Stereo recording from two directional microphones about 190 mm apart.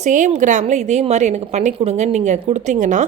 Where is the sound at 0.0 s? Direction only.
40° right (ahead or behind).